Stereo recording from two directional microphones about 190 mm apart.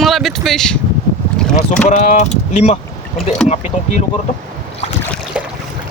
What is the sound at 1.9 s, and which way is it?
Speech, 40° left (ahead or behind).